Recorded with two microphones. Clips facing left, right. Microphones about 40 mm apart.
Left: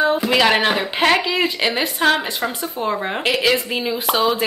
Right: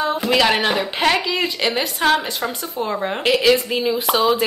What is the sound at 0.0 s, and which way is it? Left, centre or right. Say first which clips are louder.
Speech: left 2 dB; centre.